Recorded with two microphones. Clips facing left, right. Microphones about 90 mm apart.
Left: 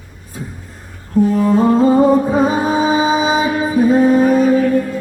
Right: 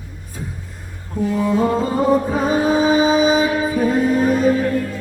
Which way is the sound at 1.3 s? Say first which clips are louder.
Left 2 dB; 40° left (ahead or behind).